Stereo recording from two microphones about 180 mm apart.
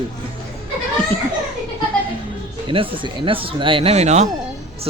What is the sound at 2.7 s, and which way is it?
Speech, 30° right (ahead or behind).